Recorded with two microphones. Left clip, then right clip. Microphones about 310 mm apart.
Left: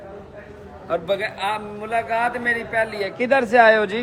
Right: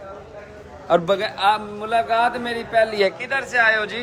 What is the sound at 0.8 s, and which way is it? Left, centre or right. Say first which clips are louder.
A man's voice: right 4 dB; centre.